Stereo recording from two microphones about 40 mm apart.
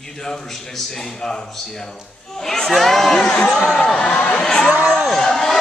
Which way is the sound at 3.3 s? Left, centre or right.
Left.